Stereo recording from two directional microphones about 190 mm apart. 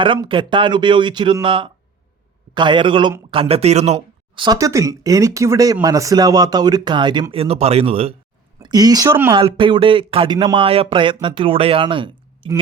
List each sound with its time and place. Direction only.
0.0 s speech: 25° right (ahead or behind)
4.4 s speech: 15° right (ahead or behind)
8.6 s speech: 20° right (ahead or behind)
9.4 s speech: 25° right (ahead or behind)